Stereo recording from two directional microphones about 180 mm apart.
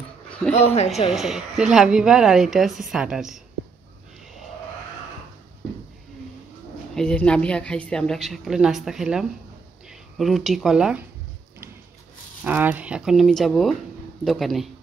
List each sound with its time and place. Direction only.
0.5 s speech: 35° left (ahead or behind)
1.1 s a woman's voice: centre (ahead or behind)
7.0 s a woman's voice: 5° left (ahead or behind)
12.4 s a woman's voice: 10° right (ahead or behind)